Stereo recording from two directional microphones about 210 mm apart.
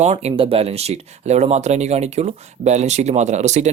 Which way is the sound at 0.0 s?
30° right (ahead or behind).